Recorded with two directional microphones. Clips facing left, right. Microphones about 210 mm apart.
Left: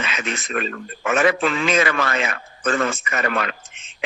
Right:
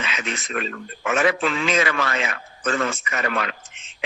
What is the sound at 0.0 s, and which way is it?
A man's voice, 50° left (ahead or behind).